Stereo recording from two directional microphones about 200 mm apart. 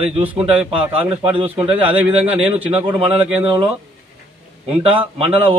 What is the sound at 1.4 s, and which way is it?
Speech, 25° right (ahead or behind).